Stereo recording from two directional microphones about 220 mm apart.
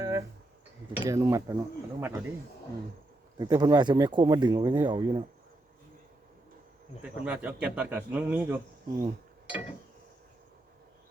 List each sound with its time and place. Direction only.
0.0 s a sound: 15° right (ahead or behind)
0.9 s a man's voice: 15° right (ahead or behind)
3.3 s speech: 15° right (ahead or behind)
7.0 s a man's voice: 5° right (ahead or behind)